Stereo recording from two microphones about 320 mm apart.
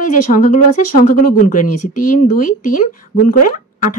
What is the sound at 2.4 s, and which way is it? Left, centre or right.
Speech, left.